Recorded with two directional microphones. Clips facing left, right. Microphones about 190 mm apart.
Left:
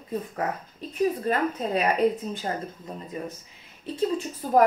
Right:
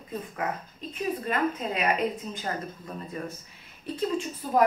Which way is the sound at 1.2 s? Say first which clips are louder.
Left 2 dB; 35° left (ahead or behind).